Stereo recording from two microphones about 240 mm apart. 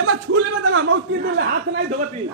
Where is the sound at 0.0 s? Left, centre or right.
Right.